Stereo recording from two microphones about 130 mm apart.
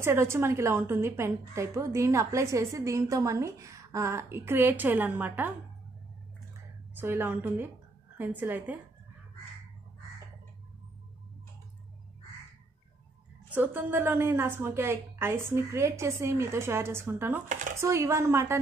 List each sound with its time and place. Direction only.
0.0 s a woman's voice: 20° right (ahead or behind)
7.0 s a woman's voice: 15° right (ahead or behind)
13.5 s a woman's voice: 15° right (ahead or behind)